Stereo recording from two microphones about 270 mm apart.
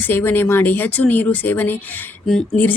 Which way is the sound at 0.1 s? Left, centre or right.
Centre.